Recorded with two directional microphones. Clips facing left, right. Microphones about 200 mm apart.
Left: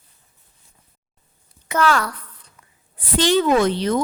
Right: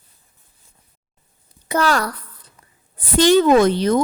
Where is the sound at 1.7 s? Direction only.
35° right (ahead or behind).